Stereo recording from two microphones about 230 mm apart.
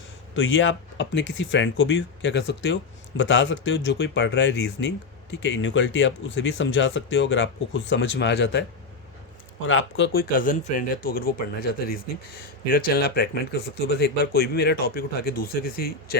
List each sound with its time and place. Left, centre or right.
0.3 s speech: left
9.6 s speech: left
10.1 s speech: left